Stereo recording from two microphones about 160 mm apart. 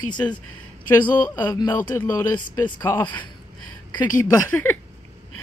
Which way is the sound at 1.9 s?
15° left (ahead or behind).